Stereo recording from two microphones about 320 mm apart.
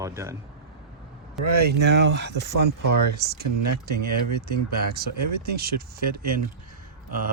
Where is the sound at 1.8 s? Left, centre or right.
Right.